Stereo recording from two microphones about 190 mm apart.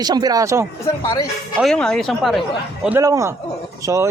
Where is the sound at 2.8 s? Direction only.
15° right (ahead or behind).